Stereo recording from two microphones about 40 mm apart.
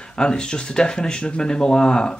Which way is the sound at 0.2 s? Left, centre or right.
Left.